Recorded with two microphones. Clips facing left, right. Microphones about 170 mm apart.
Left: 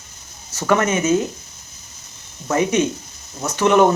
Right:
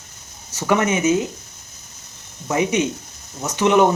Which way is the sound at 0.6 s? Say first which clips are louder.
Left 1 dB; 15° right (ahead or behind).